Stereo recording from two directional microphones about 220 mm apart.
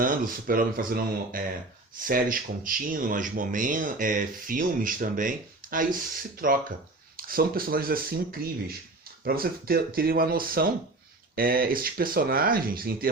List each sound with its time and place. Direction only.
0.0 s speech: 40° right (ahead or behind)